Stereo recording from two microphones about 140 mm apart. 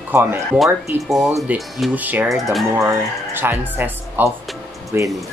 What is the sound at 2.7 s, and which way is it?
Speech, 15° right (ahead or behind).